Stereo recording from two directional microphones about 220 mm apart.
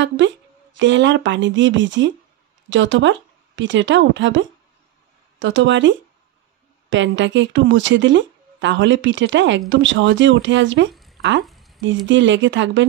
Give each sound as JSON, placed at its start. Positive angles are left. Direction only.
{"t": 0.7, "sound": "speech", "side_deg": -55}
{"t": 10.9, "sound": "a sound", "side_deg": 0}
{"t": 12.1, "sound": "speech", "side_deg": -55}